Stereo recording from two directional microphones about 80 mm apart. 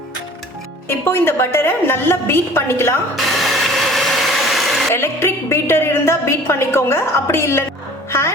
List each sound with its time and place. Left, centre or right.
0.9 s a woman's voice: left
3.2 s vehicle: centre
4.9 s a woman's voice: left